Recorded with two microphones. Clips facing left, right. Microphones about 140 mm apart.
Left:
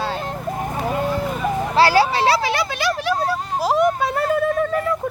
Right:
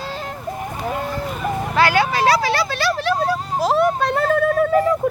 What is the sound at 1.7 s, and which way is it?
Speech, 35° left (ahead or behind).